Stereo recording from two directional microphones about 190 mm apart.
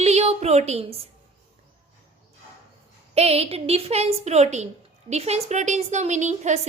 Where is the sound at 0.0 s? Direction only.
35° right (ahead or behind).